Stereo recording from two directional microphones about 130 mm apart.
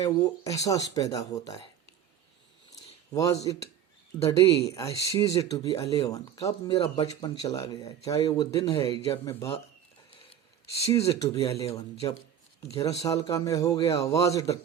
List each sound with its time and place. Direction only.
0.0 s speech: 25° left (ahead or behind)
2.7 s a sound: 25° left (ahead or behind)
3.4 s speech: 25° left (ahead or behind)
10.9 s speech: 25° left (ahead or behind)
13.0 s speech: 25° left (ahead or behind)